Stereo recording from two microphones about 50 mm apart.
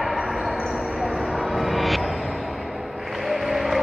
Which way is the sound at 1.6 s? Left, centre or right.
Centre.